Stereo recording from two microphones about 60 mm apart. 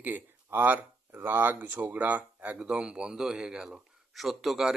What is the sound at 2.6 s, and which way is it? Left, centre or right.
Speech, centre.